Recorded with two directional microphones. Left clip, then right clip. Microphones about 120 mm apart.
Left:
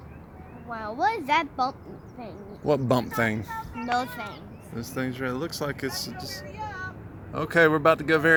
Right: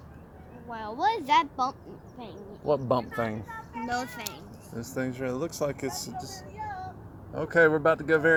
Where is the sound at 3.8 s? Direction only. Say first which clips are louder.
Left 5 dB; 5° right (ahead or behind); by 6.4 s 10° left (ahead or behind).